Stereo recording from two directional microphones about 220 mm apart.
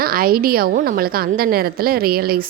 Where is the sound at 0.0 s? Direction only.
40° right (ahead or behind).